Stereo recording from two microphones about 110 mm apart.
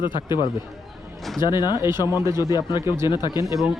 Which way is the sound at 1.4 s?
40° left (ahead or behind).